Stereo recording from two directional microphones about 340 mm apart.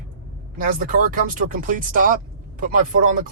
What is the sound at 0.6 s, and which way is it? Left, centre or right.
Speech, right.